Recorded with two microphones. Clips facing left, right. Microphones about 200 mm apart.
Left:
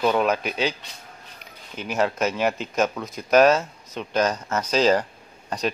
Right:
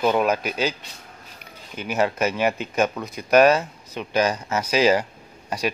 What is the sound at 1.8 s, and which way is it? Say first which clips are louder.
Speech: right 1 dB; 5° right (ahead or behind).